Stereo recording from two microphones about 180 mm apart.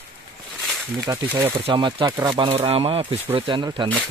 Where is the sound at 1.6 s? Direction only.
25° right (ahead or behind).